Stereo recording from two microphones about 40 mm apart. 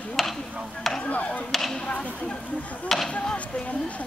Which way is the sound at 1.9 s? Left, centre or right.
Left.